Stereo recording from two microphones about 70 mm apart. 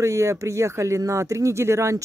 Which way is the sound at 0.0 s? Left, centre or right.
Right.